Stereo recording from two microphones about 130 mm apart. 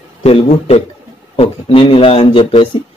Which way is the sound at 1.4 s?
45° left (ahead or behind).